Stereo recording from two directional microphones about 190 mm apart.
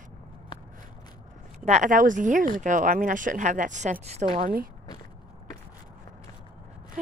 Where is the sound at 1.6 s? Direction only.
40° right (ahead or behind).